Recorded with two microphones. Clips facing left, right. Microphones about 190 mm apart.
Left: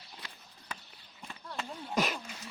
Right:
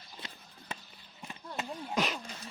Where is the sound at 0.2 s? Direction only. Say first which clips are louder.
Right 2 dB; 20° right (ahead or behind).